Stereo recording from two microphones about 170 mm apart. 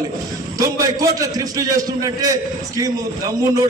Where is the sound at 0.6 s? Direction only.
20° right (ahead or behind).